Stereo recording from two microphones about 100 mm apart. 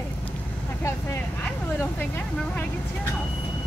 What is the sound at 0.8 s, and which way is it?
Vehicle, 20° left (ahead or behind).